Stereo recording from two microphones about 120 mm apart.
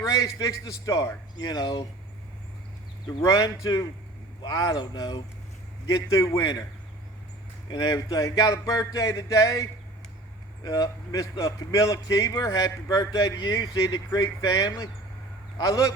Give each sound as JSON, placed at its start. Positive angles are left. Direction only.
{"t": 0.3, "sound": "a man's voice", "side_deg": 30}
{"t": 3.2, "sound": "a man's voice", "side_deg": 25}
{"t": 5.9, "sound": "a man's voice", "side_deg": 25}
{"t": 7.7, "sound": "a man's voice", "side_deg": 35}